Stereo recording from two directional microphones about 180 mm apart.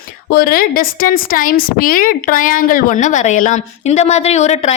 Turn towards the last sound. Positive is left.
turn(degrees=40)  # may be behind; listen again after turning